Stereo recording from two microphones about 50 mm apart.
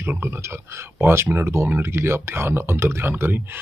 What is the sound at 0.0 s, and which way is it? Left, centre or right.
Speech, right.